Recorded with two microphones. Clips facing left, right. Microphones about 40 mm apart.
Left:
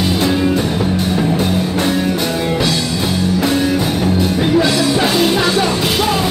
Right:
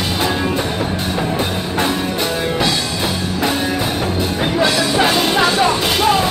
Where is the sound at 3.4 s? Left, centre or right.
Centre.